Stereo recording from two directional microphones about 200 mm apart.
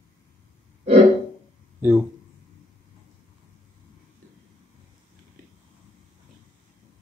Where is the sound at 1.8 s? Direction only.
5° right (ahead or behind).